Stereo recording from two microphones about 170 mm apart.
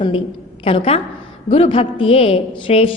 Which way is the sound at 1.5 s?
35° left (ahead or behind).